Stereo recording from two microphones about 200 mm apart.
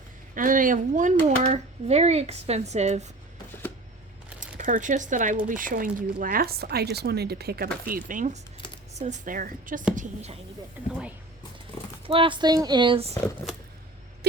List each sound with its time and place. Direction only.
0.3 s speech: 40° right (ahead or behind)
4.4 s speech: 40° right (ahead or behind)
12.0 s speech: 25° right (ahead or behind)